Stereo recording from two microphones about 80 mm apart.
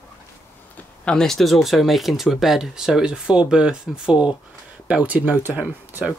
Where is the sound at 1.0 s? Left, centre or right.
Centre.